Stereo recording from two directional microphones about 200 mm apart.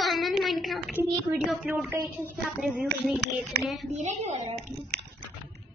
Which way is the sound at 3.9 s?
35° right (ahead or behind).